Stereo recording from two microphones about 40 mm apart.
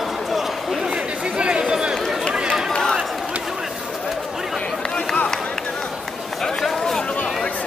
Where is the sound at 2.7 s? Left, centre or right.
Centre.